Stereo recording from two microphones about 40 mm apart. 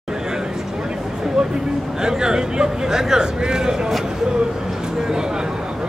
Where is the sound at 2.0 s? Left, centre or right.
Centre.